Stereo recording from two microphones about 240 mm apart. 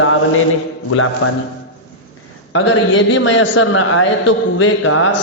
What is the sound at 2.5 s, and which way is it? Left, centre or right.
A man's voice, left.